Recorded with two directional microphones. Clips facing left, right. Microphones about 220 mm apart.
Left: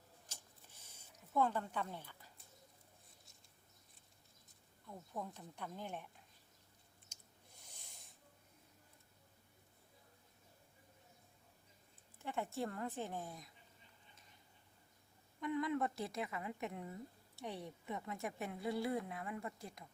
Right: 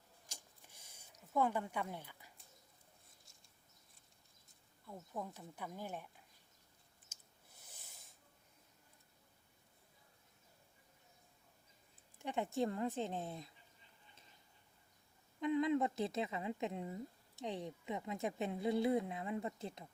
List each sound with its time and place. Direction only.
0.3 s printer: 10° right (ahead or behind)
1.3 s speech: 10° right (ahead or behind)
4.9 s speech: 5° right (ahead or behind)
12.2 s a woman's voice: 15° right (ahead or behind)
15.4 s a woman's voice: 20° right (ahead or behind)